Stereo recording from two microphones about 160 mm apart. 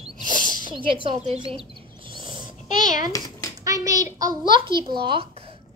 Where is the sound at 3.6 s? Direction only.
20° right (ahead or behind).